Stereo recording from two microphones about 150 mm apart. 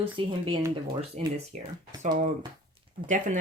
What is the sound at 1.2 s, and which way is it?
Speech, 45° right (ahead or behind).